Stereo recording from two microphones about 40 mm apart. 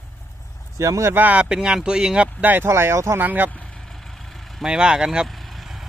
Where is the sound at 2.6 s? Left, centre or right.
Right.